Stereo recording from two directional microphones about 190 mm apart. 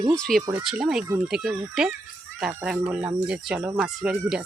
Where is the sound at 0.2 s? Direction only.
Centre (ahead or behind).